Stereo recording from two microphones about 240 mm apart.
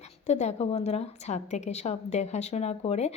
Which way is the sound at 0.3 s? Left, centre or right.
Left.